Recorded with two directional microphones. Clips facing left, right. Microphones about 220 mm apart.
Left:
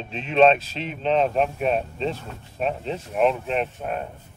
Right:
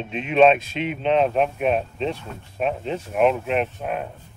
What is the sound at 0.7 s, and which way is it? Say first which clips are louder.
Speech: right 5 dB; 35° left (ahead or behind).